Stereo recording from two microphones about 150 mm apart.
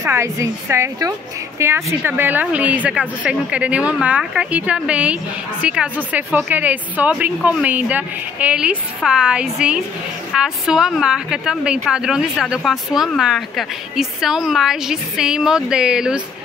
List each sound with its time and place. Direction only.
0.0 s a woman's voice: 20° right (ahead or behind)